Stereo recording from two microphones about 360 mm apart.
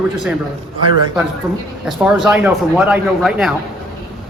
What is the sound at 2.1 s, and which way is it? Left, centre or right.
Speech, centre.